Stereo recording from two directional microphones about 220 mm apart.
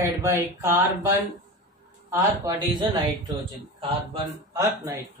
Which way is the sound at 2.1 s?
15° right (ahead or behind).